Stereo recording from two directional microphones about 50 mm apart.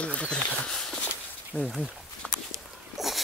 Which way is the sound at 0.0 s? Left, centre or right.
Left.